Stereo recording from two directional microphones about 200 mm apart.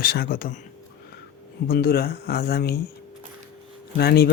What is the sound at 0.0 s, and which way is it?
Speech, 45° left (ahead or behind).